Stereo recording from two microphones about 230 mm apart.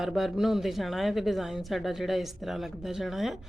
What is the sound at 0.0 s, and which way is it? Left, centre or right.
Speech, centre.